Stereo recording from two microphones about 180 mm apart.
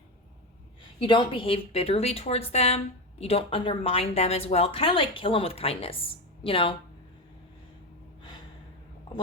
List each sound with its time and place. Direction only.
0.9 s a woman's voice: 25° left (ahead or behind)